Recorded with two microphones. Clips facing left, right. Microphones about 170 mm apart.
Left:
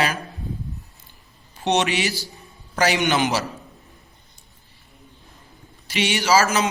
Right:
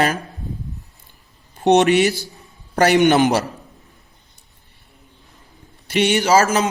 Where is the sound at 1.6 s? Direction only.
50° right (ahead or behind).